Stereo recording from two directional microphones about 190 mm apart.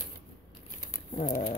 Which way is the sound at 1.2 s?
45° left (ahead or behind).